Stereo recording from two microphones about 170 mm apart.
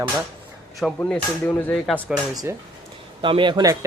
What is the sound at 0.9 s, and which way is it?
Speech, 10° left (ahead or behind).